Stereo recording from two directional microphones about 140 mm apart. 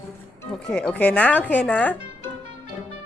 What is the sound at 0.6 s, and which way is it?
Speech, 5° left (ahead or behind).